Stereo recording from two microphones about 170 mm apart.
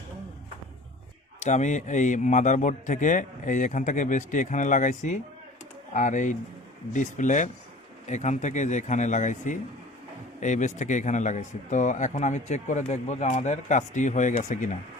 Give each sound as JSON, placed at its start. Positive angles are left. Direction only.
{"t": 1.4, "sound": "speech", "side_deg": 45}